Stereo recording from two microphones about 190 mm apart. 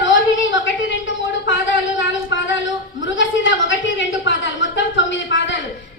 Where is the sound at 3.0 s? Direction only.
80° left.